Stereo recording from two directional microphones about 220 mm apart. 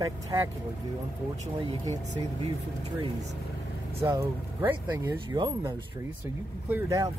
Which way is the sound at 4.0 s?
15° right (ahead or behind).